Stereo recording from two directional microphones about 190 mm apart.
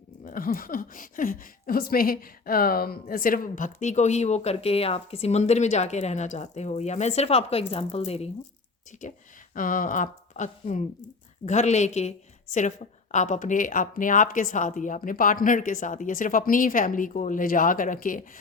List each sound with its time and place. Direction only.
0.3 s a woman's voice: 45° left (ahead or behind)
9.6 s a woman's voice: 45° left (ahead or behind)